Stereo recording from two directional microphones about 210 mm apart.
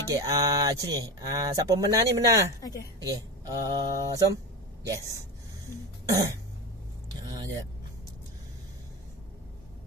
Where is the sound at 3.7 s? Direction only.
15° right (ahead or behind).